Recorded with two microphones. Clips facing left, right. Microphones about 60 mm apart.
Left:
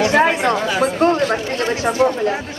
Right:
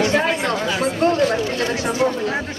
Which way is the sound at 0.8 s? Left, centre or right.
Left.